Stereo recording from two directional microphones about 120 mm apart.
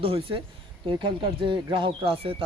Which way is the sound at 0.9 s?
40° right (ahead or behind).